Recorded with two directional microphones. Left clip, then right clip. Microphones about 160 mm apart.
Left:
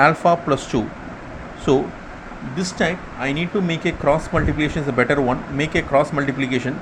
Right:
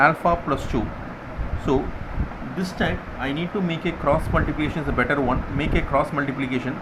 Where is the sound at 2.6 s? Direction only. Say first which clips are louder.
Left 4 dB; 45° left (ahead or behind).